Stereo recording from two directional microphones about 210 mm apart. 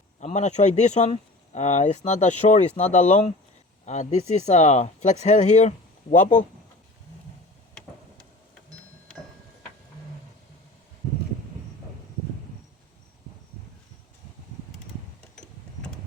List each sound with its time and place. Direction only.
0.2 s speech: 35° left (ahead or behind)